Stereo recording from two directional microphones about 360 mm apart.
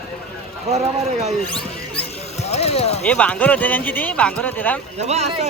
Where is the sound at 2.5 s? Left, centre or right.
Centre.